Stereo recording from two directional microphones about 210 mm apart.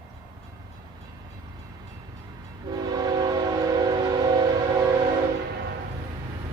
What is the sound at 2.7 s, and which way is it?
Train, 20° right (ahead or behind).